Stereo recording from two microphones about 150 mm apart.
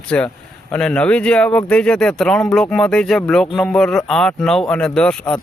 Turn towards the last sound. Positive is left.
turn(degrees=5)  # may be behind; listen again after turning